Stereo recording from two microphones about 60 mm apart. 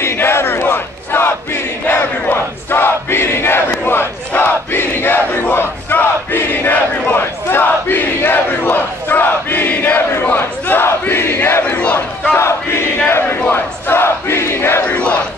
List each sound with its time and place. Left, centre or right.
0.0 s battle cry: left
4.4 s crowd: left
10.2 s battle cry: left
11.6 s battle cry: left
12.4 s battle cry: left
14.9 s battle cry: left